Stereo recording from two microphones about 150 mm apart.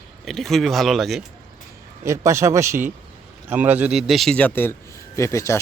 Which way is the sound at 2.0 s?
20° right (ahead or behind).